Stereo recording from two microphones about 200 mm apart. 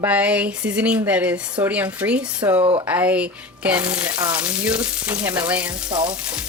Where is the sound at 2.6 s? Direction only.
30° right (ahead or behind).